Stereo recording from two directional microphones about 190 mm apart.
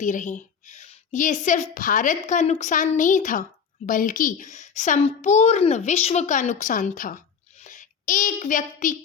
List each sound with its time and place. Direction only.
0.0 s a woman's voice: 40° left (ahead or behind)